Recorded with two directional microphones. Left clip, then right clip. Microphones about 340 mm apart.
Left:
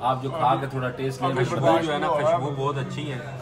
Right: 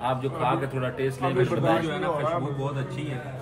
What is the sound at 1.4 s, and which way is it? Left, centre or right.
Speech, left.